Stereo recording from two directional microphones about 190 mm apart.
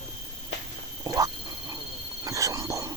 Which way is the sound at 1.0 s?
20° right (ahead or behind).